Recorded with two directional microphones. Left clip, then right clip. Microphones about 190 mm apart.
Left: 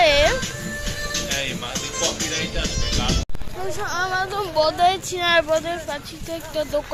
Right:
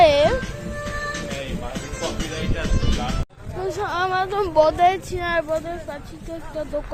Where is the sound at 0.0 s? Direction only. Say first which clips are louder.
Right 2 dB; 25° right (ahead or behind).